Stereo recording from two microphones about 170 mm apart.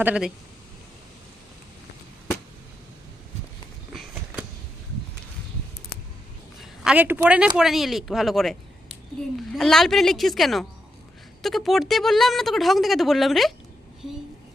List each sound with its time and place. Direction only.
0.0 s speech: 5° right (ahead or behind)
3.9 s a sound: 5° right (ahead or behind)
6.6 s speech: 5° right (ahead or behind)